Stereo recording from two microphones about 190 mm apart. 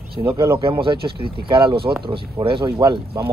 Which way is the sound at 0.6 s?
25° right (ahead or behind).